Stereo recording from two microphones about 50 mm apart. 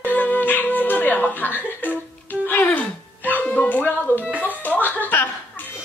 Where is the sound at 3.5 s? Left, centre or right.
Left.